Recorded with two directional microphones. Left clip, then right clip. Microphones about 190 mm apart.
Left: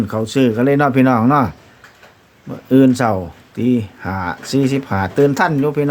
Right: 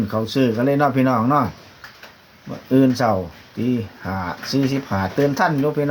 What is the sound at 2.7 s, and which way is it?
Speech, 40° left (ahead or behind).